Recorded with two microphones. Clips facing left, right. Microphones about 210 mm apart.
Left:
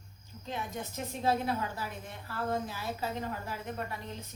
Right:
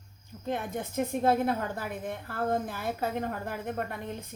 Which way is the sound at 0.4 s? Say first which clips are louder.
Right 6 dB; 55° right (ahead or behind).